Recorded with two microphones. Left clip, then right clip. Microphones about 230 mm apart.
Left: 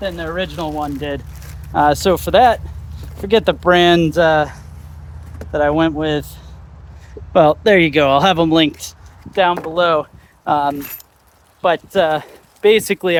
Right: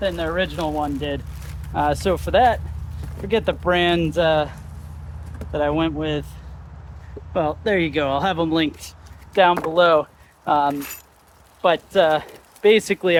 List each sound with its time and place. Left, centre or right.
0.0 s speech: left
1.7 s speech: left
7.3 s speech: left
9.3 s speech: left
10.4 s speech: left